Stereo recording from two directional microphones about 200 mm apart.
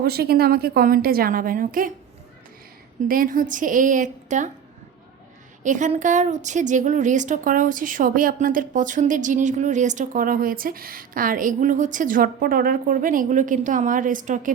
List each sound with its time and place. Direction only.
0.0 s a woman's voice: 50° right (ahead or behind)
3.1 s a woman's voice: 45° right (ahead or behind)
5.6 s a woman's voice: 40° right (ahead or behind)